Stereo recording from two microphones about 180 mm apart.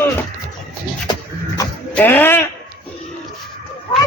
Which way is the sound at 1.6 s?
20° left (ahead or behind).